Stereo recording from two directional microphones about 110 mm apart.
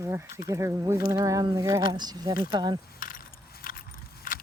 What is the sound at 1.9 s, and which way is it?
Speech, 40° right (ahead or behind).